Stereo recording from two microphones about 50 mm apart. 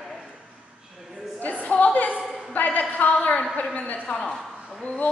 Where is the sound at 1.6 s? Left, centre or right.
Left.